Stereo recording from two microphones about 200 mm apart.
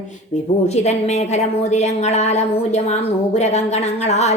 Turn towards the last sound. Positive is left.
turn(degrees=35)  # may be behind; listen again after turning